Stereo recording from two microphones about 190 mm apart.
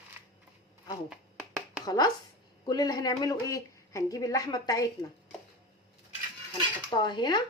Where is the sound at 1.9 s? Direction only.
20° left (ahead or behind).